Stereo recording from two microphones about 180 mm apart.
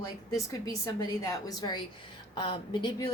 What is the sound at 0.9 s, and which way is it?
Speech, 20° left (ahead or behind).